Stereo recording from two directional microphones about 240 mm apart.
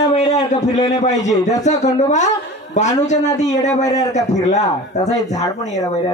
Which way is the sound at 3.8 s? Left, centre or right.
Centre.